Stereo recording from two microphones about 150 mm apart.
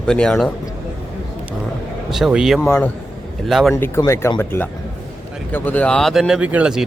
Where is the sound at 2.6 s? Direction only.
10° left (ahead or behind).